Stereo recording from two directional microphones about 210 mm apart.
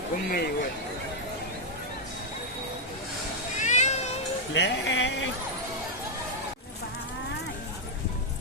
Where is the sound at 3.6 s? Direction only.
35° left (ahead or behind).